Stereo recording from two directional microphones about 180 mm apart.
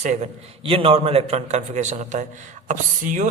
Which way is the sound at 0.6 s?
30° right (ahead or behind).